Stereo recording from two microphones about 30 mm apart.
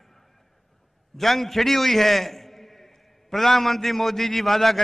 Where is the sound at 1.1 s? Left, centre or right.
Centre.